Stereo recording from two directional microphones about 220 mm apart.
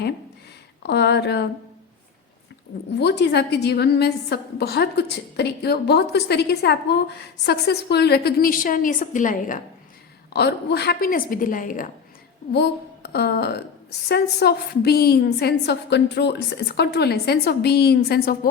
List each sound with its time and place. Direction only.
0.8 s a woman's voice: 50° left (ahead or behind)
3.0 s a woman's voice: 50° left (ahead or behind)
10.3 s a woman's voice: 50° left (ahead or behind)
12.5 s a woman's voice: 50° left (ahead or behind)